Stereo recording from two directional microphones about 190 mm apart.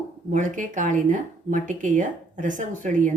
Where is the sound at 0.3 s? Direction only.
40° right (ahead or behind).